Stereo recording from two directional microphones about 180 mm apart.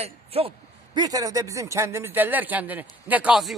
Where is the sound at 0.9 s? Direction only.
20° right (ahead or behind).